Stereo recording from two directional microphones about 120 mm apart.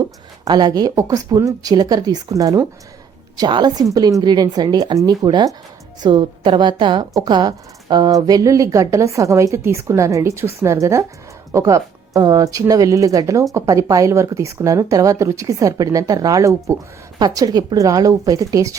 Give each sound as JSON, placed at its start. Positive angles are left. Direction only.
{"t": 0.0, "sound": "a woman's voice", "side_deg": -35}